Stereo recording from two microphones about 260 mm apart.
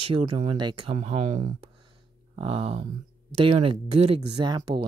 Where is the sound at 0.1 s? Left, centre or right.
Right.